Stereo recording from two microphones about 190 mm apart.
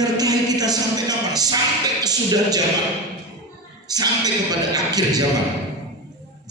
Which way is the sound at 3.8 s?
20° right (ahead or behind).